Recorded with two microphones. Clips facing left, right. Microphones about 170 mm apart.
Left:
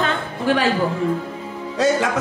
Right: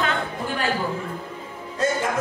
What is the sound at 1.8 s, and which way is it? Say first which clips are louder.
Music: left 6 dB; 80° left.